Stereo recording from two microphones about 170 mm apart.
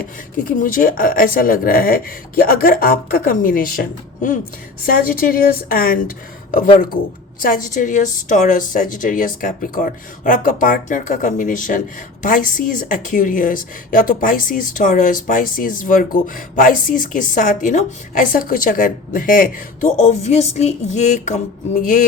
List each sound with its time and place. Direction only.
0.6 s a woman's voice: 55° left (ahead or behind)